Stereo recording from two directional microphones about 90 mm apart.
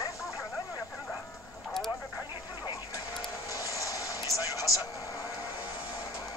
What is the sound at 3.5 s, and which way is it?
Vehicle, 40° left (ahead or behind).